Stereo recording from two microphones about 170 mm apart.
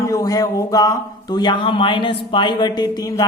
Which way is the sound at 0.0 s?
20° left (ahead or behind).